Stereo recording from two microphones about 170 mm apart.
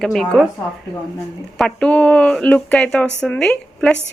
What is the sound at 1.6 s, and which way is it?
A woman's voice, 5° left (ahead or behind).